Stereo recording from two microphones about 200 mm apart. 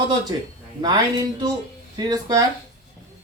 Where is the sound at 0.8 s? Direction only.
20° right (ahead or behind).